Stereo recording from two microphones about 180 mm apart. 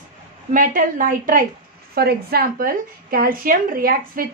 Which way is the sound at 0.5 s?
50° right (ahead or behind).